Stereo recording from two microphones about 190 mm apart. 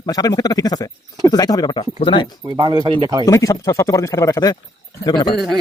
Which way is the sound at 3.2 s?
20° left (ahead or behind).